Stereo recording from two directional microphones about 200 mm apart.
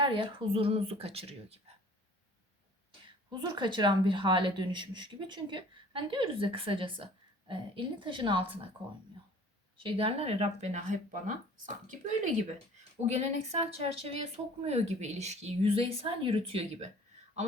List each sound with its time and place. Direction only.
0.0 s a woman's voice: 25° right (ahead or behind)
3.5 s a woman's voice: 25° right (ahead or behind)
9.7 s speech: 25° right (ahead or behind)